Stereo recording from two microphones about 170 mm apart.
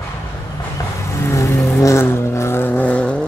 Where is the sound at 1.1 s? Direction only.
15° left (ahead or behind).